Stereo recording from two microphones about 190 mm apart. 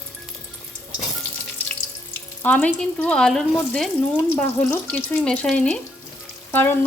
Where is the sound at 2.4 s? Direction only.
5° left (ahead or behind).